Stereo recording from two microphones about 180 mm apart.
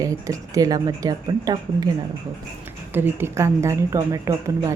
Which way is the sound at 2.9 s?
15° right (ahead or behind).